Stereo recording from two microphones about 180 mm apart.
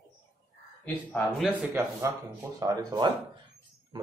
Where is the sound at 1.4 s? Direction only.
10° right (ahead or behind).